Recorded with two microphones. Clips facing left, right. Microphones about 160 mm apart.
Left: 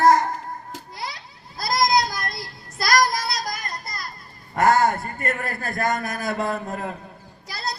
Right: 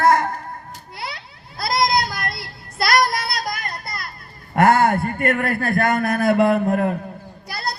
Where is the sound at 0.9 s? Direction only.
65° right (ahead or behind).